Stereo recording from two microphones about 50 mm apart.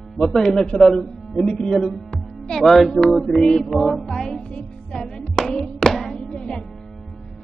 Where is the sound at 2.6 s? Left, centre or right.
Centre.